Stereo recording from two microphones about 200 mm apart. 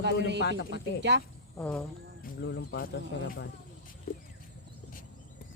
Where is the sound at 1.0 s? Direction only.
60° right (ahead or behind).